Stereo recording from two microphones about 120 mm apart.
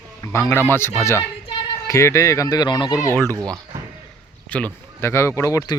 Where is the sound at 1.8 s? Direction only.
25° left (ahead or behind).